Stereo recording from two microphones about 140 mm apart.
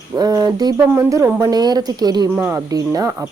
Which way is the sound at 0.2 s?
25° right (ahead or behind).